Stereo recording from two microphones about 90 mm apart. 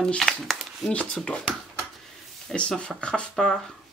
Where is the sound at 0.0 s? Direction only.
5° left (ahead or behind).